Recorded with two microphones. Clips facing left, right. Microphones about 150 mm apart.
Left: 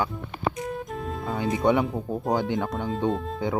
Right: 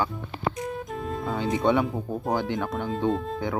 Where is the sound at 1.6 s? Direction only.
15° left (ahead or behind).